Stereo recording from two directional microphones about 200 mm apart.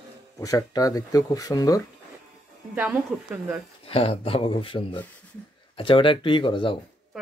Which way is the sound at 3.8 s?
30° left (ahead or behind).